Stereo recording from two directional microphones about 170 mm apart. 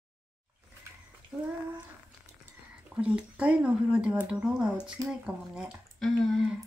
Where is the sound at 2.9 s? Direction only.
5° right (ahead or behind).